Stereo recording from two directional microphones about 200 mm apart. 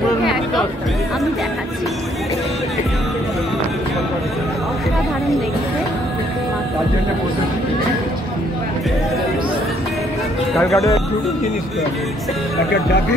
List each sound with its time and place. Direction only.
10.6 s speech: 15° left (ahead or behind)